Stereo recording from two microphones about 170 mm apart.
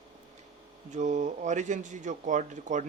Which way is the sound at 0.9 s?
45° right (ahead or behind).